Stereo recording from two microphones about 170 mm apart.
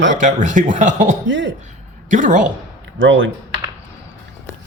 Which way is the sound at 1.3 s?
90° right.